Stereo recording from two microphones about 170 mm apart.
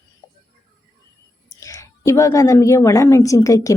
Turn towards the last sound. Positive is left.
turn(degrees=20)  # may be behind; listen again after turning